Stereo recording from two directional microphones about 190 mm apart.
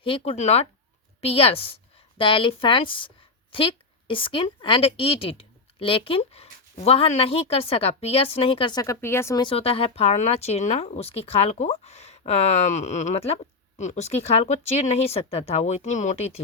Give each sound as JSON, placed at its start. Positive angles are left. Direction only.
{"t": 0.0, "sound": "a woman's voice", "side_deg": 30}